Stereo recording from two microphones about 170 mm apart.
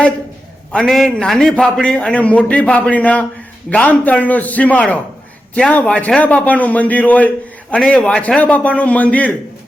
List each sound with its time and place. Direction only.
0.7 s a man's voice: 5° left (ahead or behind)